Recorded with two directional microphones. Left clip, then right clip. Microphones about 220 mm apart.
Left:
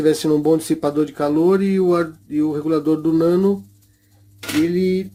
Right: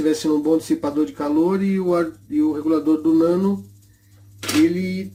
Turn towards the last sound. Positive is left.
turn(degrees=40)  # may be behind; listen again after turning